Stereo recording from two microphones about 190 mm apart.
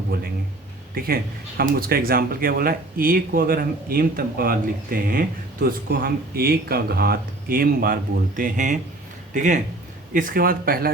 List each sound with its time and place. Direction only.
0.9 s speech: 50° right (ahead or behind)